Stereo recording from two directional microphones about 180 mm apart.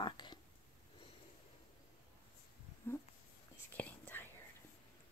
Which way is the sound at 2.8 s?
10° left (ahead or behind).